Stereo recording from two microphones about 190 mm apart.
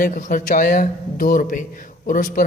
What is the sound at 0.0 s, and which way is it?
A man's voice, 45° left (ahead or behind).